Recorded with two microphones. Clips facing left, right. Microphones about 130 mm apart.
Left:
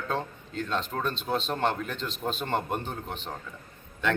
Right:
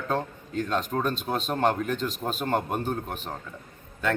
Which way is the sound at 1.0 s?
10° right (ahead or behind).